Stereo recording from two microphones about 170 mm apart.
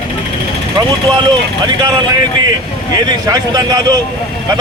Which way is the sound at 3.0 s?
25° right (ahead or behind).